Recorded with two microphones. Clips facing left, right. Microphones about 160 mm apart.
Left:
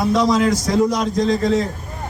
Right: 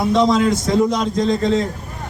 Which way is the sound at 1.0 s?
Centre (ahead or behind).